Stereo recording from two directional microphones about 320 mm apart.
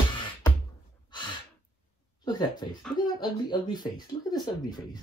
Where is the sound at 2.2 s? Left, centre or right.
Centre.